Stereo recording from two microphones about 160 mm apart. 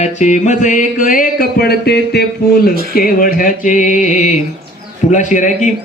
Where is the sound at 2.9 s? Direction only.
60° left (ahead or behind).